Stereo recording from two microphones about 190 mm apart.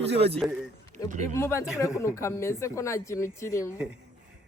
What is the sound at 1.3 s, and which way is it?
A woman's voice, 15° left (ahead or behind).